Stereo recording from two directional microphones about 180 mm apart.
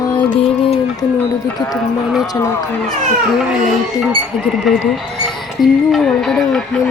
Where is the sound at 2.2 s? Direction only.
20° left (ahead or behind).